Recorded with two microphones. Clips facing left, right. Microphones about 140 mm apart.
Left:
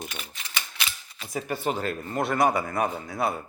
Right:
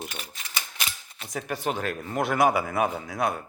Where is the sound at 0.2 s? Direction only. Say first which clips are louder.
Even; 40° right (ahead or behind).